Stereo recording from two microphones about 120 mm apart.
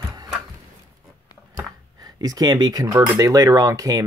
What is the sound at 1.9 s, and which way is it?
Speech, 30° right (ahead or behind).